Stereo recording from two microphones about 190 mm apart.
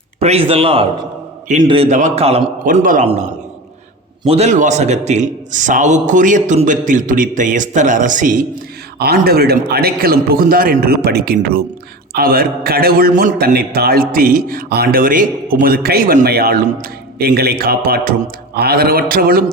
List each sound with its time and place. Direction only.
0.2 s a man's voice: 30° right (ahead or behind)
1.9 s a man's voice: 40° right (ahead or behind)
2.6 s a man's voice: 45° right (ahead or behind)
4.2 s a man's voice: 30° right (ahead or behind)
9.0 s a man's voice: 55° right (ahead or behind)